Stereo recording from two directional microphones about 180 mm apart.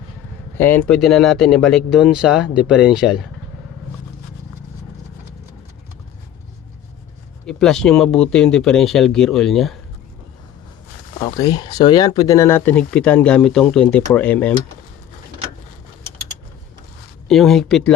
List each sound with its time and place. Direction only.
0.5 s speech: 10° left (ahead or behind)
7.4 s speech: 5° left (ahead or behind)
11.2 s speech: 20° left (ahead or behind)
17.2 s speech: centre (ahead or behind)